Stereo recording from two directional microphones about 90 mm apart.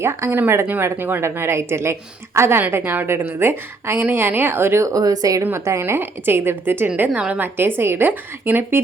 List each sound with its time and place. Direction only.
0.0 s a woman's voice: 30° right (ahead or behind)
5.4 s a woman's voice: 30° right (ahead or behind); by 7.4 s 10° right (ahead or behind)
7.4 s a woman's voice: 25° right (ahead or behind)